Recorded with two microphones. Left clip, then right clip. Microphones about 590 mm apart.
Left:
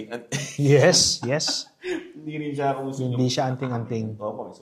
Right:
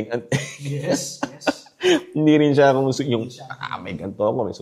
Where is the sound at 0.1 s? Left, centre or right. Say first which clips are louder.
Right 3 dB; right.